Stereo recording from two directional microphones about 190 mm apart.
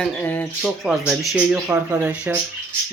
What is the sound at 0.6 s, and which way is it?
Speech, 5° right (ahead or behind).